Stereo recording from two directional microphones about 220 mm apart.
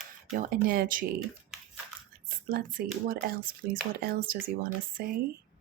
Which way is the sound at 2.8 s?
40° right (ahead or behind).